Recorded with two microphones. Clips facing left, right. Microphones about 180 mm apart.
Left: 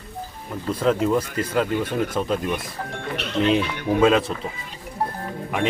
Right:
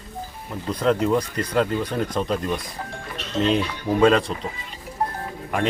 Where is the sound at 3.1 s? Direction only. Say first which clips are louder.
Left 1 dB; 70° left (ahead or behind).